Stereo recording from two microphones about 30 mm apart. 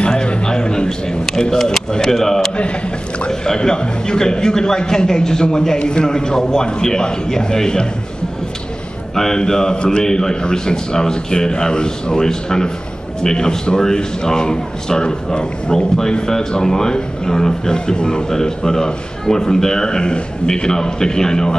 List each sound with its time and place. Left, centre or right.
0.5 s a sound: left
2.0 s a man's voice: centre
9.1 s a man's voice: centre